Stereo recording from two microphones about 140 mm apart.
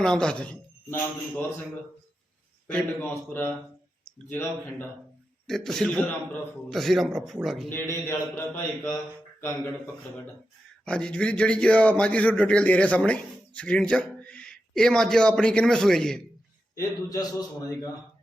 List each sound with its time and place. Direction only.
0.0 s speech: 5° left (ahead or behind)
5.5 s a man's voice: centre (ahead or behind)
7.7 s speech: 15° left (ahead or behind)
16.7 s a man's voice: 25° left (ahead or behind)